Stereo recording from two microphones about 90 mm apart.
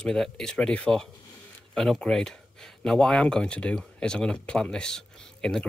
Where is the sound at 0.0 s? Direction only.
5° left (ahead or behind).